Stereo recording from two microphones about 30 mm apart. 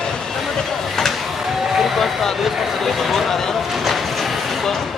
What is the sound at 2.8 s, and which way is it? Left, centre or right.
Speech, centre.